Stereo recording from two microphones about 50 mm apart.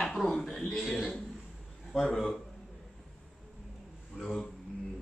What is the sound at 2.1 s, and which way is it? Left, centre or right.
Speech, centre.